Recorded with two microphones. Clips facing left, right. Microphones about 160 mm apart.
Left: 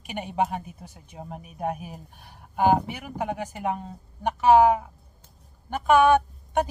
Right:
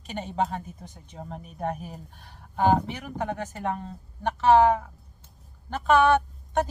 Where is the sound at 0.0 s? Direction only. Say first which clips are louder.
Left 1 dB; 15° left (ahead or behind).